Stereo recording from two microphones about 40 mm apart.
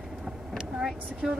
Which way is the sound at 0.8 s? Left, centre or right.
Centre.